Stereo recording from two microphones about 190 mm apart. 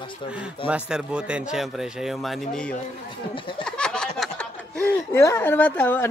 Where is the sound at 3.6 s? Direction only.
5° left (ahead or behind).